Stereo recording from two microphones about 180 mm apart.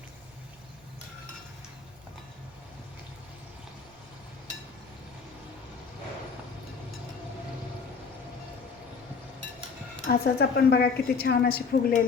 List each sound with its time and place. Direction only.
10.1 s a woman's voice: 60° left (ahead or behind)